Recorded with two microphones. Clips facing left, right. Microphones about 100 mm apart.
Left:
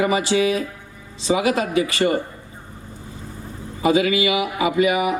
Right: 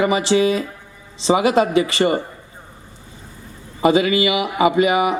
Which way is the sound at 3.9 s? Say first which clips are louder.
Even; 25° right (ahead or behind).